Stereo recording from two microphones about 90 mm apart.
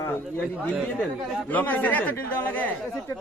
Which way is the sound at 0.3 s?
15° left (ahead or behind).